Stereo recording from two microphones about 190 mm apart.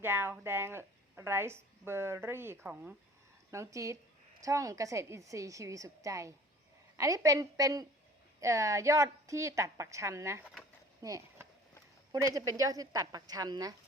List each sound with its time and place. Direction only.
0.0 s a woman's voice: 10° right (ahead or behind)
10.4 s speech: 5° left (ahead or behind)
11.0 s a sound: 15° right (ahead or behind)
12.5 s a woman's voice: 20° right (ahead or behind)